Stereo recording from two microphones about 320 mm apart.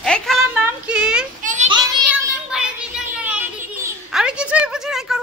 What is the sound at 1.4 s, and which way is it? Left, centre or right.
Child singing, right.